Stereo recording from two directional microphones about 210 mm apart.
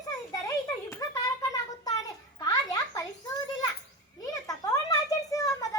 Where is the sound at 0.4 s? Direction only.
15° left (ahead or behind).